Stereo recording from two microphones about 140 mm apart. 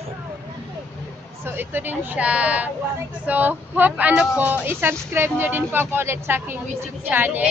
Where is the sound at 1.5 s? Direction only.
15° right (ahead or behind).